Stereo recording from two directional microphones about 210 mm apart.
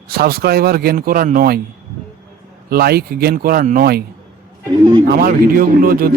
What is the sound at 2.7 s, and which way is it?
A man's voice, 45° right (ahead or behind).